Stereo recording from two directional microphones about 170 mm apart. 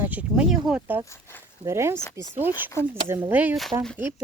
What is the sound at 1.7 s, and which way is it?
Speech, 15° right (ahead or behind).